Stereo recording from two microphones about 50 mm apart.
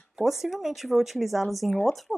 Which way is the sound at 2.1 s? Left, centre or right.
Centre.